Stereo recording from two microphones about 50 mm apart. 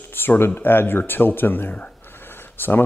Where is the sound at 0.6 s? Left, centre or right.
Left.